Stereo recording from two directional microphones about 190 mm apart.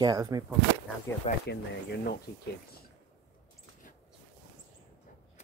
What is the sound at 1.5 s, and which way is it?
Speech, 60° left (ahead or behind).